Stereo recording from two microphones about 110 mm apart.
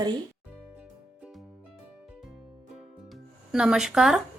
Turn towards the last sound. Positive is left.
turn(degrees=-5)  # may be behind; listen again after turning